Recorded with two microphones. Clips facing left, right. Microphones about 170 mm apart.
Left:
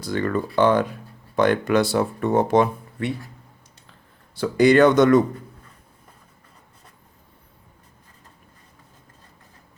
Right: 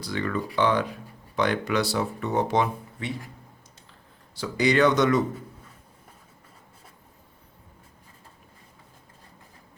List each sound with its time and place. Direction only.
0.0 s speech: 45° left (ahead or behind)
4.4 s speech: 50° left (ahead or behind)